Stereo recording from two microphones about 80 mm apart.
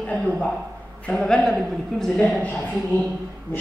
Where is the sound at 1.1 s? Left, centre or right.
Centre.